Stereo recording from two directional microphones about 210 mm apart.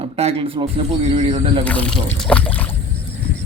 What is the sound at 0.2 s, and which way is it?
Speech, 25° right (ahead or behind).